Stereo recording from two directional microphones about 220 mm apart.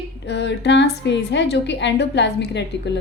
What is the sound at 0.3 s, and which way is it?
A woman's voice, 50° left (ahead or behind).